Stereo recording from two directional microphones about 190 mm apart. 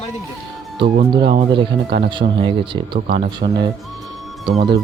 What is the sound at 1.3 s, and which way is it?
Speech, 30° right (ahead or behind).